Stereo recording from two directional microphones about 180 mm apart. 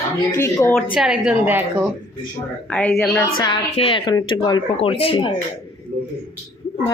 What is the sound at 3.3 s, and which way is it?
Speech, 25° left (ahead or behind).